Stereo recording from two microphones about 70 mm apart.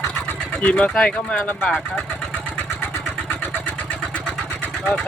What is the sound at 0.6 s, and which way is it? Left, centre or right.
Speech, centre.